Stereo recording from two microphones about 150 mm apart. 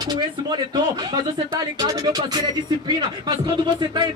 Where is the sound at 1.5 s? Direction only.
25° right (ahead or behind).